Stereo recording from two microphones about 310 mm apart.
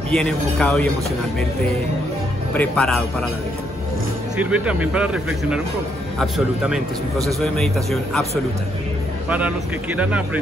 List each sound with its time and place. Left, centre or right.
0.1 s a man's voice: centre
2.5 s a man's voice: centre
4.4 s a man's voice: centre
9.9 s a man's voice: centre